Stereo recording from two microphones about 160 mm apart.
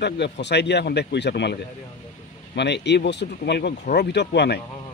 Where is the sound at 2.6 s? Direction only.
90° left.